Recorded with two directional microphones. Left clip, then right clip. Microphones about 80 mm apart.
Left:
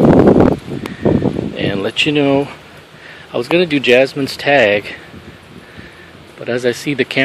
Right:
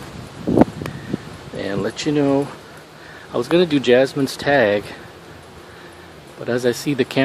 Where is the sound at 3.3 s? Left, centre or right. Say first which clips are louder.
Left 3 dB; centre.